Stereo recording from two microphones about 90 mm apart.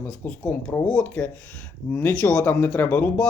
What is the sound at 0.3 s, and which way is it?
Speech, 15° left (ahead or behind).